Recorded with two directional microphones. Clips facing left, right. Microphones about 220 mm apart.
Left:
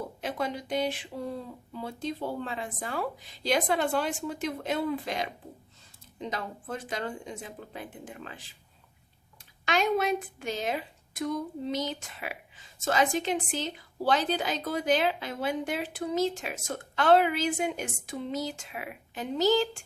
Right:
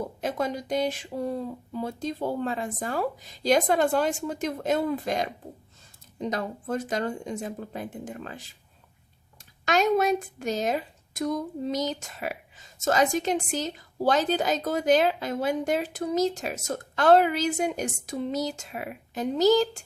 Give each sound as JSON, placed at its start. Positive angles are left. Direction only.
{"t": 0.2, "sound": "a woman's voice", "side_deg": -45}
{"t": 9.6, "sound": "a woman's voice", "side_deg": -45}